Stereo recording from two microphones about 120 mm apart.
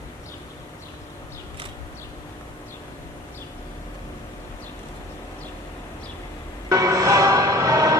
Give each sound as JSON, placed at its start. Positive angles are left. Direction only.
{"t": 6.7, "sound": "music", "side_deg": -30}